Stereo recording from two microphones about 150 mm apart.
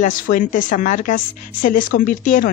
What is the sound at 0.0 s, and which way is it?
A woman's voice, 65° left (ahead or behind).